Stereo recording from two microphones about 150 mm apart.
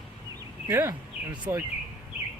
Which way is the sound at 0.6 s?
15° right (ahead or behind).